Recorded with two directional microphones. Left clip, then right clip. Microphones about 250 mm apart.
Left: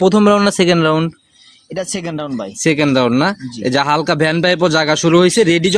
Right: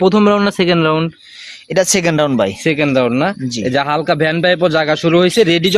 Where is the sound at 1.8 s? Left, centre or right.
Right.